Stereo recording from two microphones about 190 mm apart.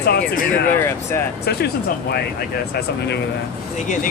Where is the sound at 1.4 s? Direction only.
60° left (ahead or behind).